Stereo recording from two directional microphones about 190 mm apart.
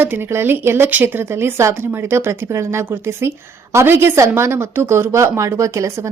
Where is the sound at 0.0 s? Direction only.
10° right (ahead or behind).